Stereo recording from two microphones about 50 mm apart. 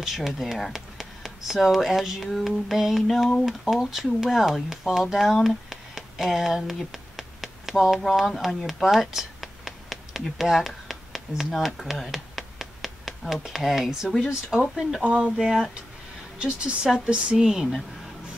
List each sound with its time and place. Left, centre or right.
0.0 s speech: centre
6.8 s a sound: centre
14.5 s speech: centre
15.0 s speech: right
15.3 s speech: centre